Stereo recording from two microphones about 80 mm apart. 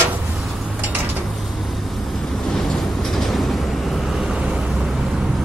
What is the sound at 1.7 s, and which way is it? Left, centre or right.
Train, centre.